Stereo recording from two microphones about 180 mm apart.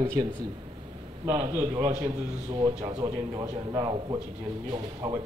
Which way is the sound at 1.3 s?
15° right (ahead or behind).